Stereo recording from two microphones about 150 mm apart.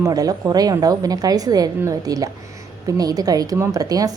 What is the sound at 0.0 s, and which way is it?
A woman's voice, 25° right (ahead or behind).